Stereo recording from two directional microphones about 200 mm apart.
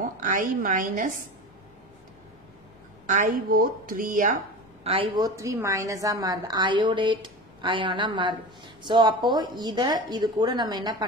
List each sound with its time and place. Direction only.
0.0 s a woman's voice: 40° right (ahead or behind)
3.1 s a woman's voice: 45° right (ahead or behind)
4.8 s a woman's voice: 25° right (ahead or behind)